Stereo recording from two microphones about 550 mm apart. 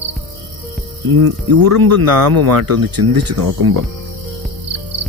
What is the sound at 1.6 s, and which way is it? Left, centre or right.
Speech, right.